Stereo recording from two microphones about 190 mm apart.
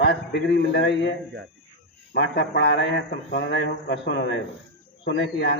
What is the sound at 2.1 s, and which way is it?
Speech, 65° left (ahead or behind).